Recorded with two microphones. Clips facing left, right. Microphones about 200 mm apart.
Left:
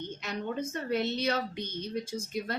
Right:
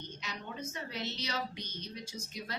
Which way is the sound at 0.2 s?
55° left (ahead or behind).